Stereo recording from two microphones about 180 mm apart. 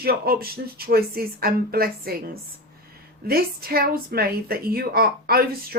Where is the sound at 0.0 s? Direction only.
55° right (ahead or behind).